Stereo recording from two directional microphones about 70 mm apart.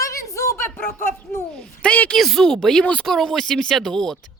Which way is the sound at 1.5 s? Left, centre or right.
Centre.